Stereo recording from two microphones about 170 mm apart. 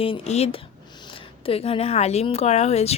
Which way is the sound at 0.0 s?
35° left (ahead or behind).